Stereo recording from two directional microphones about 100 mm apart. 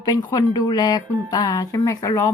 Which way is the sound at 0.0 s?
45° left (ahead or behind).